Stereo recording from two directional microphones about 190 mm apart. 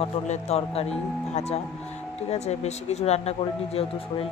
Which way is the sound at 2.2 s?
35° left (ahead or behind).